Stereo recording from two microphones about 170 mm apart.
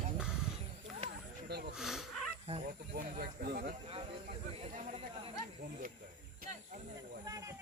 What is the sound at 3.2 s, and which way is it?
Snake, 60° right (ahead or behind).